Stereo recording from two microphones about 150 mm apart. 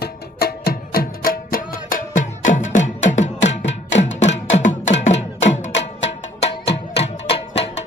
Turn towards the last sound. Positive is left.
turn(degrees=40)  # may be behind; listen again after turning